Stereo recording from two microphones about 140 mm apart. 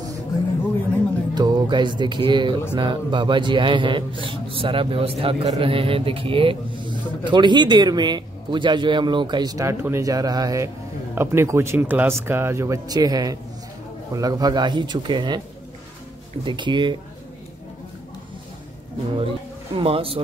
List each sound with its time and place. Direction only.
1.3 s a man's voice: 30° right (ahead or behind)
16.4 s a man's voice: 35° right (ahead or behind)
19.1 s speech: 40° right (ahead or behind)